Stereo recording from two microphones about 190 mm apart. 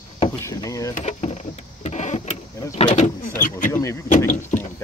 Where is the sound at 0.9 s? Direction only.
35° left (ahead or behind).